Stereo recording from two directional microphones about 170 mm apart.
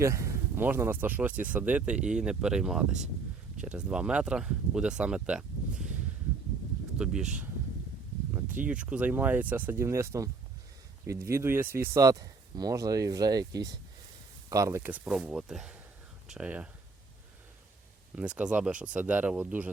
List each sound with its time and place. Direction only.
0.0 s speech: 15° right (ahead or behind)
7.0 s speech: 5° right (ahead or behind)
8.4 s speech: 10° right (ahead or behind)
18.2 s speech: 5° right (ahead or behind)